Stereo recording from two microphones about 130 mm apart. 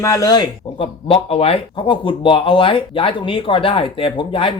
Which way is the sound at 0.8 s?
45° left (ahead or behind).